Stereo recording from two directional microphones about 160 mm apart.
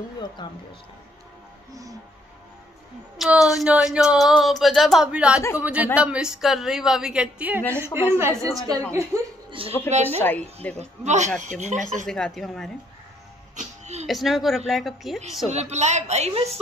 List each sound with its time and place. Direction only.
0.4 s speech: 30° left (ahead or behind)
3.2 s a woman's voice: centre (ahead or behind); by 9.3 s 20° right (ahead or behind)
9.6 s speech: 35° right (ahead or behind)
10.2 s speech: 10° left (ahead or behind)
11.1 s a woman's voice: 50° right (ahead or behind)
12.1 s speech: centre (ahead or behind)
13.6 s music: 45° right (ahead or behind)
14.0 s speech: centre (ahead or behind)
15.4 s a woman's voice: 45° right (ahead or behind)